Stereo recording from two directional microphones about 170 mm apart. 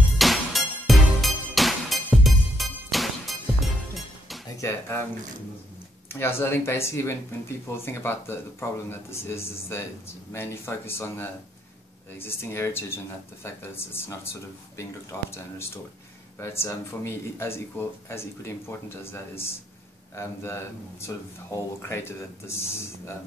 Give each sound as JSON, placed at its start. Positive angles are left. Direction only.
{"t": 0.2, "sound": "music", "side_deg": 0}
{"t": 4.6, "sound": "speech", "side_deg": 15}
{"t": 6.1, "sound": "speech", "side_deg": 15}
{"t": 16.3, "sound": "speech", "side_deg": 15}
{"t": 20.2, "sound": "speech", "side_deg": 15}